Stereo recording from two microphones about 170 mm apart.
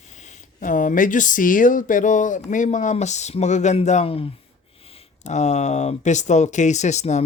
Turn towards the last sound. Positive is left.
turn(degrees=40)  # may be behind; listen again after turning